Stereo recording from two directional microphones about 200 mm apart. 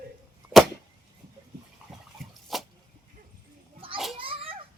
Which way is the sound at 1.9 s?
Centre (ahead or behind).